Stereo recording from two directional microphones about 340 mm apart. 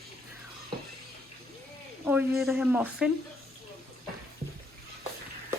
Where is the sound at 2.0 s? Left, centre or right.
Centre.